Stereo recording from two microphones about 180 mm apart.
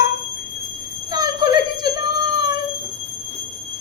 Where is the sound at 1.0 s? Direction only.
20° right (ahead or behind).